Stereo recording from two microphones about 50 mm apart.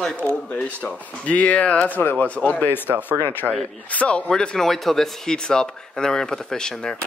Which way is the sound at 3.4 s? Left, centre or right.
Centre.